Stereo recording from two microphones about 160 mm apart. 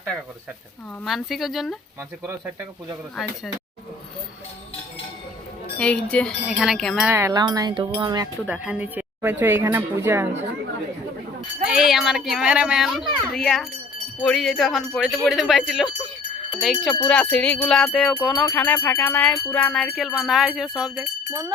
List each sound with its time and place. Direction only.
1.0 s speech: centre (ahead or behind)
5.7 s speech: 5° left (ahead or behind)
7.1 s wind chime: 20° right (ahead or behind)
8.4 s speech: 5° right (ahead or behind)
11.3 s speech: centre (ahead or behind)
17.1 s music: 5° left (ahead or behind)
18.3 s music: 10° left (ahead or behind)
20.9 s speech: 25° right (ahead or behind)